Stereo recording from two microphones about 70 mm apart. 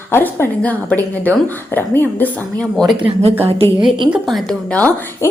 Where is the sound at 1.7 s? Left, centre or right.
Left.